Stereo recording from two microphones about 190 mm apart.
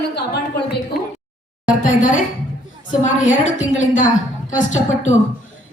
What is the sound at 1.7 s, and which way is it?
A woman's voice, 45° left (ahead or behind).